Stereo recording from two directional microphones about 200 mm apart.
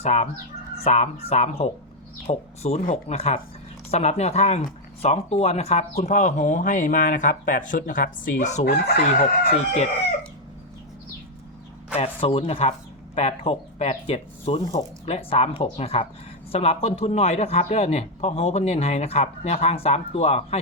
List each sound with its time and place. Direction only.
0.0 s a man's voice: 35° left (ahead or behind)
8.6 s crowing: 50° left (ahead or behind)
11.9 s a man's voice: 30° left (ahead or behind)